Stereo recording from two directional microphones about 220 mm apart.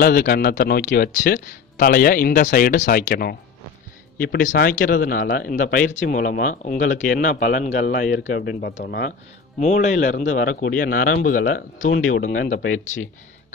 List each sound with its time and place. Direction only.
0.0 s speech: 40° left (ahead or behind)
9.6 s speech: 35° left (ahead or behind)